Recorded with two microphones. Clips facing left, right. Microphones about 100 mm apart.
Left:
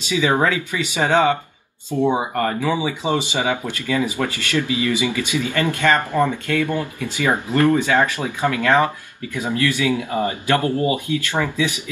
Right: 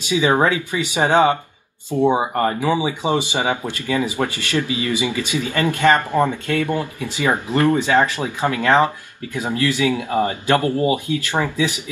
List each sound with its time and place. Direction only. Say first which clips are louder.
0.1 s speech: right 2 dB; 20° right (ahead or behind)